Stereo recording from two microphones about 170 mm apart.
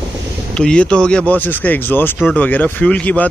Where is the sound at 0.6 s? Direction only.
5° left (ahead or behind).